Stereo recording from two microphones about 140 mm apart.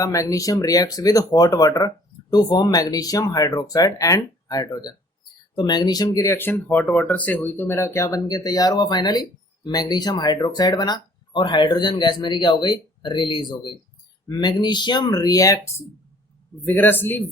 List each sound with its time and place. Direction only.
0.0 s speech: 25° left (ahead or behind)
16.6 s a man's voice: 15° left (ahead or behind)